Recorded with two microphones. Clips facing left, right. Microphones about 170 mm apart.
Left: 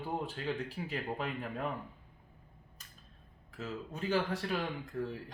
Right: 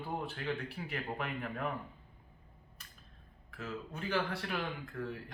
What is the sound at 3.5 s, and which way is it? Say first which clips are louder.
Speech: left 2 dB; 15° left (ahead or behind).